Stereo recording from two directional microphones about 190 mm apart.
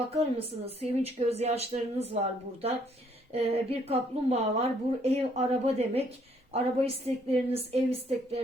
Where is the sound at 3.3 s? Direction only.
30° right (ahead or behind).